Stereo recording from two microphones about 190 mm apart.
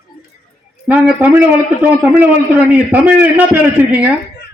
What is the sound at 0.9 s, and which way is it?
A man's voice, 10° right (ahead or behind).